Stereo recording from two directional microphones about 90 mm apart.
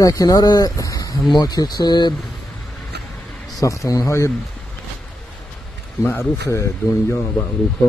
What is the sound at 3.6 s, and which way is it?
Speech, 35° left (ahead or behind).